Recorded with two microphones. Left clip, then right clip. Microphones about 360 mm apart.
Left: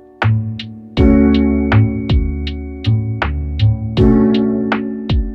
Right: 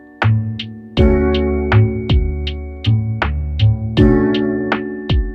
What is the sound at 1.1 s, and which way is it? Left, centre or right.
Music, centre.